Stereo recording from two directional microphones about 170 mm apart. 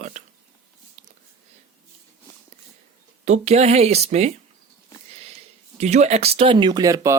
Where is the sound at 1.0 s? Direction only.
40° right (ahead or behind).